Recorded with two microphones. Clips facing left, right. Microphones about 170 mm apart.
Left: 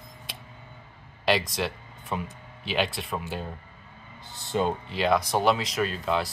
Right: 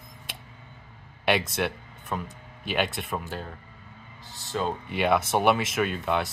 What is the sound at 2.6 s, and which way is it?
Speech, 50° right (ahead or behind).